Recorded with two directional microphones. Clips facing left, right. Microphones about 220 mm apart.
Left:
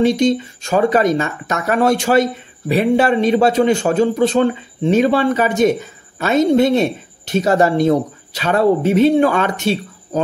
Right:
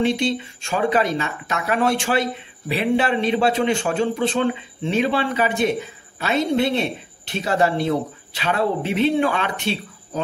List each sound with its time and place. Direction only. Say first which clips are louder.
0.0 s speech: left 6 dB; 40° left (ahead or behind)